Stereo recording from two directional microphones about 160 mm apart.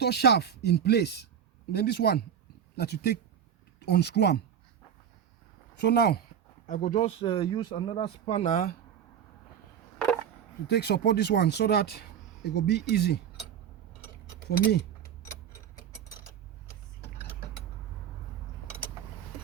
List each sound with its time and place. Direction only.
0.0 s speech: 90° left
5.7 s speech: 90° left
6.7 s speech: 55° left (ahead or behind)
6.9 s speech: 35° left (ahead or behind); by 8.7 s 55° left (ahead or behind)
10.7 s speech: 90° left